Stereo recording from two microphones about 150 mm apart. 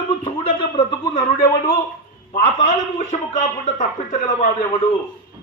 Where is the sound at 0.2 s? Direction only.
30° left (ahead or behind).